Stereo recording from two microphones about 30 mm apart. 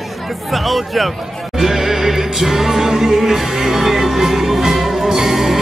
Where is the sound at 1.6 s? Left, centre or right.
Centre.